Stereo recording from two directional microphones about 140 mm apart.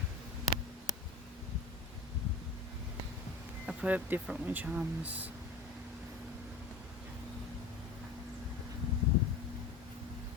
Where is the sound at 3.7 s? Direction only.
10° right (ahead or behind).